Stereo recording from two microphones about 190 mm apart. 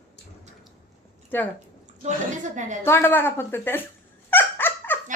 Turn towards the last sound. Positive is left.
turn(degrees=10)  # may be behind; listen again after turning